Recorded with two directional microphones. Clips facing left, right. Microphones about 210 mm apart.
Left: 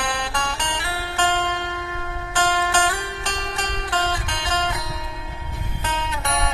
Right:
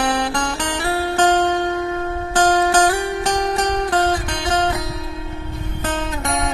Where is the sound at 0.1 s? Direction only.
45° right (ahead or behind).